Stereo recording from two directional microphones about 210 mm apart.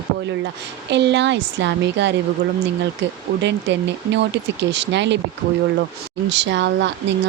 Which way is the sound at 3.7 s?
55° right (ahead or behind).